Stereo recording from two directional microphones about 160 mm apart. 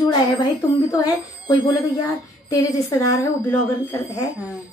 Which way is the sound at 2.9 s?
20° left (ahead or behind).